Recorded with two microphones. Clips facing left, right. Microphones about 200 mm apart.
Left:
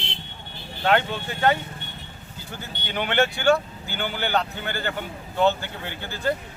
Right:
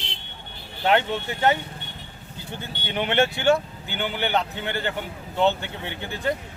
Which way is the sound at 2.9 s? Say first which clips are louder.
Right 1 dB; 25° right (ahead or behind).